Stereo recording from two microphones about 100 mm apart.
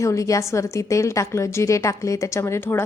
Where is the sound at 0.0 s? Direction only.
30° left (ahead or behind).